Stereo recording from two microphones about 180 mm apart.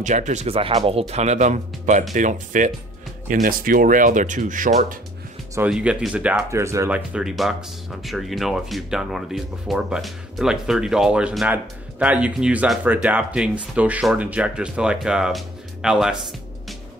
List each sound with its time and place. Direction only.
0.0 s speech: 40° right (ahead or behind)
5.7 s speech: 5° right (ahead or behind)
6.5 s speech: 15° right (ahead or behind)
7.1 s speech: 5° right (ahead or behind)